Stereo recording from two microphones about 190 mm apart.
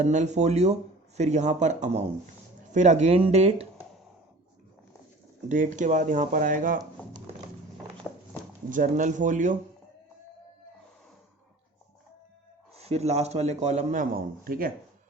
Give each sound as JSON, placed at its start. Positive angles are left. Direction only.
{"t": 0.0, "sound": "speech", "side_deg": -40}
{"t": 5.5, "sound": "speech", "side_deg": -40}
{"t": 8.7, "sound": "speech", "side_deg": -45}
{"t": 12.7, "sound": "speech", "side_deg": -35}